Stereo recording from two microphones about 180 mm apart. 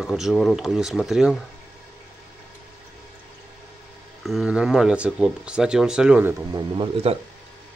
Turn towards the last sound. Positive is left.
turn(degrees=-25)  # may be behind; listen again after turning